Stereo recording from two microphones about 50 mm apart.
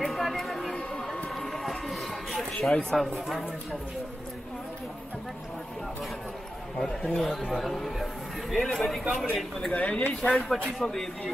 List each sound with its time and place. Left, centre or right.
0.1 s a sound: centre
2.8 s a man's voice: centre
6.8 s a man's voice: centre
9.8 s speech: left
10.2 s a man's voice: centre